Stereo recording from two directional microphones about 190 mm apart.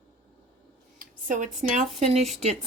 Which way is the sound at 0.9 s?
40° right (ahead or behind).